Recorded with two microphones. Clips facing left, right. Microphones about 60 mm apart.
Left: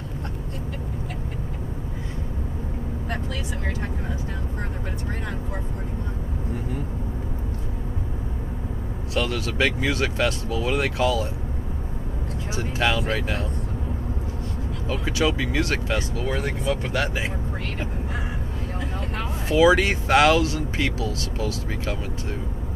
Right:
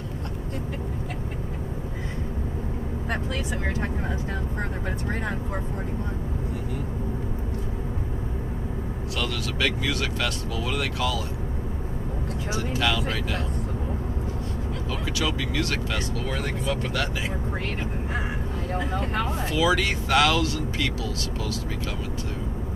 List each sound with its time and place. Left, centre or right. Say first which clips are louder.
9.1 s speech: left 5 dB; left
12.5 s speech: left 2 dB; left
14.9 s speech: left 5 dB; left
18.8 s speech: right 4 dB; right
19.5 s speech: left 7 dB; left